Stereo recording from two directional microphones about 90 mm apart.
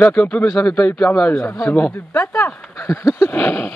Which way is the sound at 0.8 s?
15° left (ahead or behind).